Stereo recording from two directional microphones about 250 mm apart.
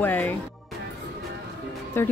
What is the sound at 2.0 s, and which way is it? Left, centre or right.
Speech, centre.